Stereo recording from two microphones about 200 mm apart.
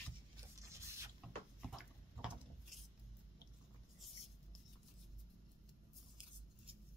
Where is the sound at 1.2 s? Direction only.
Centre (ahead or behind).